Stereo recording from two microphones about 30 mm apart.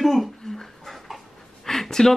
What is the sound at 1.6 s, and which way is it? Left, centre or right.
Speech, centre.